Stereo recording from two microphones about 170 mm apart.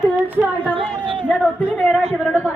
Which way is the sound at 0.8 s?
30° right (ahead or behind).